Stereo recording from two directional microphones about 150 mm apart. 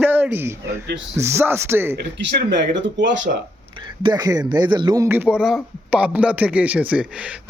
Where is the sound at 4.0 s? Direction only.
30° right (ahead or behind).